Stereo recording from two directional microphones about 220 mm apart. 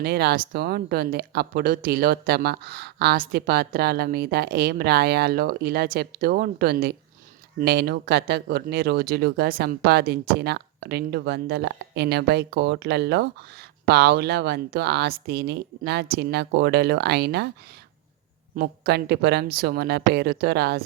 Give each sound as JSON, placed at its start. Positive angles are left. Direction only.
{"t": 0.0, "sound": "speech", "side_deg": -45}
{"t": 18.5, "sound": "speech", "side_deg": -45}